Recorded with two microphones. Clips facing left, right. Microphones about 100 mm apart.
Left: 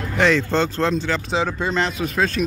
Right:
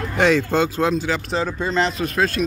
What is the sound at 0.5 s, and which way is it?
Speech, 10° right (ahead or behind).